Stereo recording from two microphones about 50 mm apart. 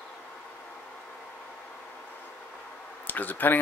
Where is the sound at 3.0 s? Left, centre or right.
Left.